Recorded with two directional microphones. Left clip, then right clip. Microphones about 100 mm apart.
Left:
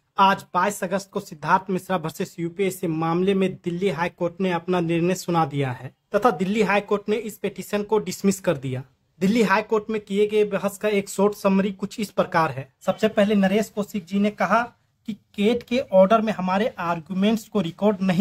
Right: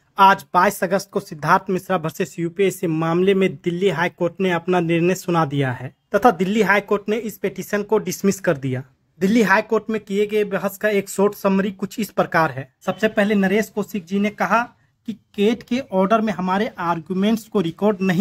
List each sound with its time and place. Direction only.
0.1 s speech: 40° right (ahead or behind)
1.7 s speech: 20° right (ahead or behind)